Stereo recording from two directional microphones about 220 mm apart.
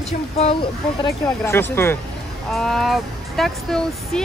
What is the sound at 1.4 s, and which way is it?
Speech, 10° left (ahead or behind).